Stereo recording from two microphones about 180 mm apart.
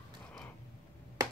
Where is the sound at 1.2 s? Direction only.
20° right (ahead or behind).